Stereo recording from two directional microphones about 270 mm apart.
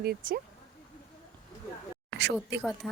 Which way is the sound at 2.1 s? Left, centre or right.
Right.